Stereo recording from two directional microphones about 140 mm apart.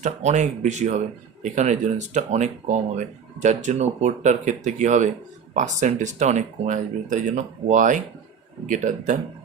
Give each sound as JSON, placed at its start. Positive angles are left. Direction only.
{"t": 0.0, "sound": "speech", "side_deg": -55}